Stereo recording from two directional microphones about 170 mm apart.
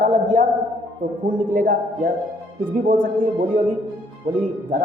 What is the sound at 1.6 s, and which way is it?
A woman's voice, 55° right (ahead or behind).